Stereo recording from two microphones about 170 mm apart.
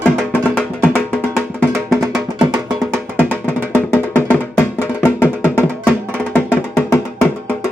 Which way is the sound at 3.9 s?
10° left (ahead or behind).